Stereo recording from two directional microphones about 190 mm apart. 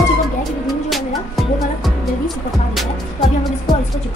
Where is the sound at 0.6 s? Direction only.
Centre (ahead or behind).